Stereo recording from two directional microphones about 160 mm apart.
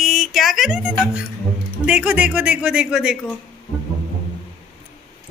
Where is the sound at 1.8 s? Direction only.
10° right (ahead or behind).